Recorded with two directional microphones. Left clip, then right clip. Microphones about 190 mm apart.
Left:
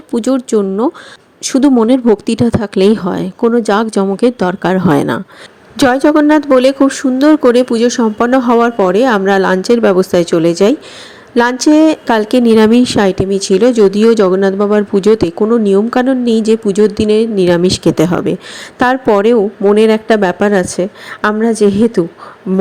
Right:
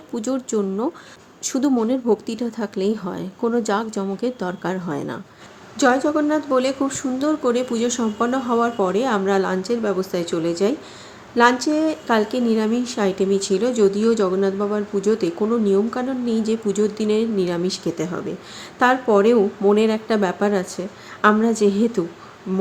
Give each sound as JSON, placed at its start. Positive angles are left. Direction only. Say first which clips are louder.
{"t": 0.1, "sound": "a woman's voice", "louder": "left 11 dB", "side_deg": 35}